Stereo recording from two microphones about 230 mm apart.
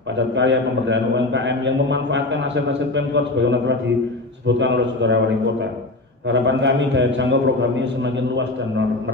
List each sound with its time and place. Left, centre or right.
0.3 s a man's voice: right